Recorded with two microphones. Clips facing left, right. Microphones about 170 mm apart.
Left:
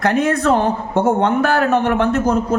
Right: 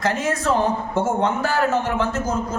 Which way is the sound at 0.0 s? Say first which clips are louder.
Left 6 dB; 60° left (ahead or behind).